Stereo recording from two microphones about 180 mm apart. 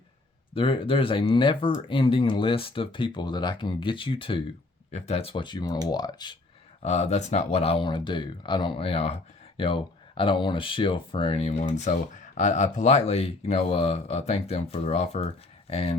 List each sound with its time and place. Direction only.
0.5 s speech: 30° left (ahead or behind)
6.8 s speech: 40° left (ahead or behind)